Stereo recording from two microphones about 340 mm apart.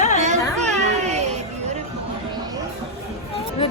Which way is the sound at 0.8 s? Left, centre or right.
Centre.